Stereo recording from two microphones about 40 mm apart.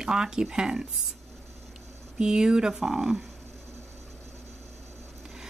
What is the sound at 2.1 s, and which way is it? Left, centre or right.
Speech, centre.